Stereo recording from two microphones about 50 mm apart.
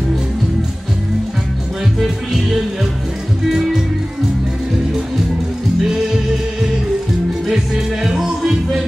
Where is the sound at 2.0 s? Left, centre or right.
Centre.